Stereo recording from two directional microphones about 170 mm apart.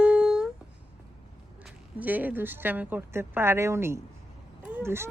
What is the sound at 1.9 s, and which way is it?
Speech, 10° right (ahead or behind).